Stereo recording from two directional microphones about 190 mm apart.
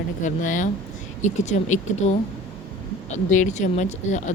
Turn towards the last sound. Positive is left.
turn(degrees=40)  # may be behind; listen again after turning